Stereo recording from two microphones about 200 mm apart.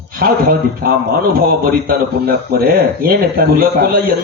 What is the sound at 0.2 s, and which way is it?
A man's voice, 45° right (ahead or behind).